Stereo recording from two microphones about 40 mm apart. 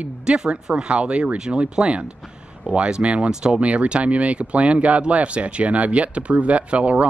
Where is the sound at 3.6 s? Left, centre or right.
Right.